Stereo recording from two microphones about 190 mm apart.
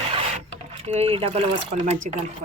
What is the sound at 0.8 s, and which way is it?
Speech, 35° right (ahead or behind).